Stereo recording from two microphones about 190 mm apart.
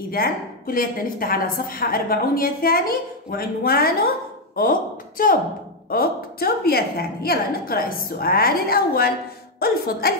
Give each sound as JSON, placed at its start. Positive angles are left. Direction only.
{"t": 0.1, "sound": "a woman's voice", "side_deg": 50}